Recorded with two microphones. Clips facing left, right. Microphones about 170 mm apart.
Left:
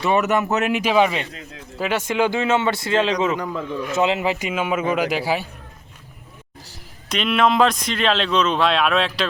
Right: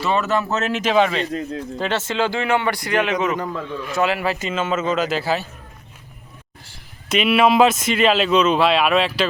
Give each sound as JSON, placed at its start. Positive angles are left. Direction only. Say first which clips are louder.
{"t": 0.0, "sound": "a man's voice", "louder": "left 1 dB", "side_deg": 15}
{"t": 1.3, "sound": "speech", "louder": "right 13 dB", "side_deg": -45}
{"t": 1.8, "sound": "a man's voice", "louder": "left 2 dB", "side_deg": 15}
{"t": 3.5, "sound": "a man's voice", "louder": "left 2 dB", "side_deg": 10}
{"t": 3.9, "sound": "a man's voice", "louder": "even", "side_deg": 20}
{"t": 7.1, "sound": "speech", "louder": "right 3 dB", "side_deg": -5}